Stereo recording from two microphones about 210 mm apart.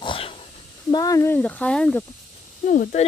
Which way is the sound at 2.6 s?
40° left (ahead or behind).